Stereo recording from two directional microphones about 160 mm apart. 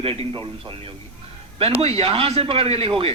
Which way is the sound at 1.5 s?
40° right (ahead or behind).